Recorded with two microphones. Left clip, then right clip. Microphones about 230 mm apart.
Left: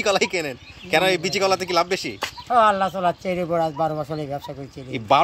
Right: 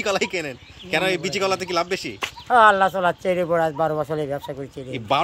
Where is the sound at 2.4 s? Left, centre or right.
Right.